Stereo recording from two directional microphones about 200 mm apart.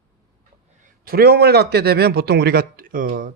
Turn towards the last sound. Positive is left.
turn(degrees=-40)  # may be behind; listen again after turning